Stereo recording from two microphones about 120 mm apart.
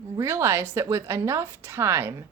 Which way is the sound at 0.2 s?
20° right (ahead or behind).